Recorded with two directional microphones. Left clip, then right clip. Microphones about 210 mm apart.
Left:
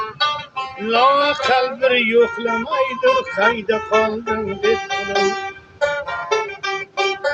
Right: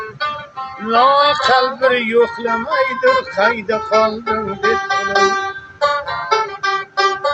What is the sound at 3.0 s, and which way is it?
Music, 10° left (ahead or behind).